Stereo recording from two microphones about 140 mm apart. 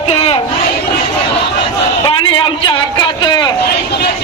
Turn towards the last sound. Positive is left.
turn(degrees=30)  # may be behind; listen again after turning